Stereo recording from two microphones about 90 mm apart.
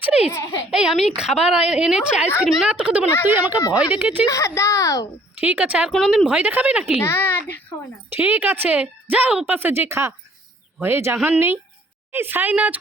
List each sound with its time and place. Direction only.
0.0 s a sound: 10° right (ahead or behind)
0.7 s speech: 5° right (ahead or behind)
4.3 s a woman's voice: 35° left (ahead or behind)
5.4 s speech: 20° right (ahead or behind)
7.0 s speech: 25° left (ahead or behind)
8.1 s speech: 20° right (ahead or behind)